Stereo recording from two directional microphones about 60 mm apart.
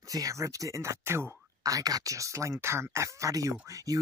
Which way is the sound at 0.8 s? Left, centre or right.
Right.